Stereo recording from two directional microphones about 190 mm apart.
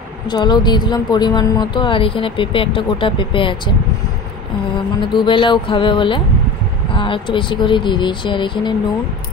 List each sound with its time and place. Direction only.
0.3 s a woman's voice: 20° left (ahead or behind)
5.0 s a woman's voice: 25° left (ahead or behind)